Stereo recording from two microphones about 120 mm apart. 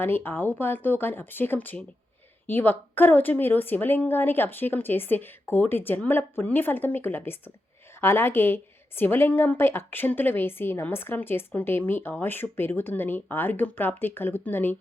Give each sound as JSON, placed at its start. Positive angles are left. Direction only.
{"t": 0.0, "sound": "a woman's voice", "side_deg": 20}